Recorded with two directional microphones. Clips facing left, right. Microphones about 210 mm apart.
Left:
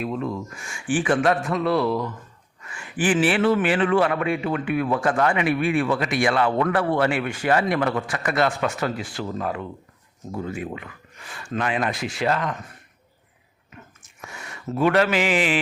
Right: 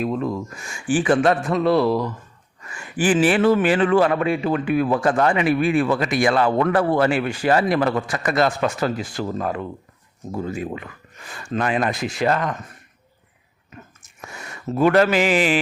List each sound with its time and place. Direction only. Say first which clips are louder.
0.0 s speech: right 4 dB; 40° right (ahead or behind)
14.2 s speech: right 2 dB; 40° right (ahead or behind)